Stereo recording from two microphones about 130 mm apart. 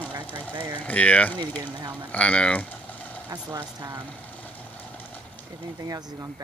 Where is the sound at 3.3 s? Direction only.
25° right (ahead or behind).